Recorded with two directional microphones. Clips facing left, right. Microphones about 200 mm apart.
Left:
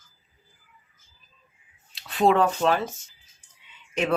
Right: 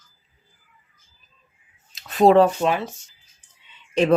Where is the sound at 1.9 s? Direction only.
40° right (ahead or behind).